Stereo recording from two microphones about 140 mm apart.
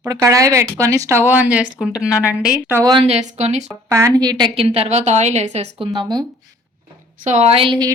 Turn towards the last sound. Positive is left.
turn(degrees=-35)  # may be behind; listen again after turning